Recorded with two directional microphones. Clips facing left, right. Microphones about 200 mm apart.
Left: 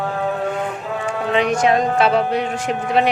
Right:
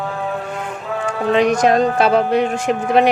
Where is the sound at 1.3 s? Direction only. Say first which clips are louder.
Right 3 dB; 40° right (ahead or behind).